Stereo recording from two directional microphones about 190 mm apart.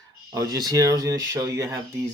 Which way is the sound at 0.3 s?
20° right (ahead or behind).